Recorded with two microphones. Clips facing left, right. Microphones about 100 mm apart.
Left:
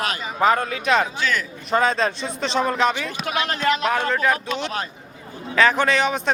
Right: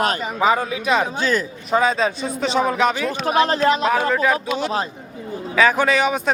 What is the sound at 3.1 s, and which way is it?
Speech, 35° right (ahead or behind).